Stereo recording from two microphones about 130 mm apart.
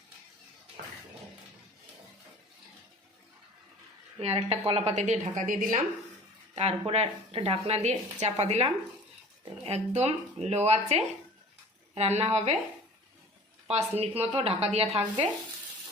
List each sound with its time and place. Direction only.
4.2 s a woman's voice: 50° right (ahead or behind); by 5.8 s 85° right
6.6 s a woman's voice: 55° right (ahead or behind)
13.7 s a woman's voice: 55° right (ahead or behind)